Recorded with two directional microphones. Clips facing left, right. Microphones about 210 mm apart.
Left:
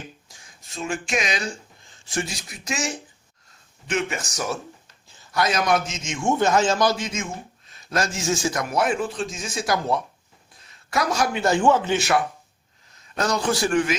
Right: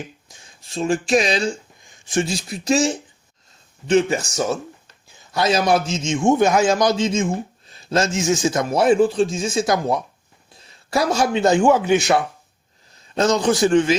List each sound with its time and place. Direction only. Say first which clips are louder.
0.3 s speech: right 2 dB; 25° right (ahead or behind)
1.8 s a man's voice: right 7 dB; 15° right (ahead or behind)
10.7 s a man's voice: right 4 dB; 30° right (ahead or behind)
12.9 s a man's voice: right 6 dB; 30° right (ahead or behind)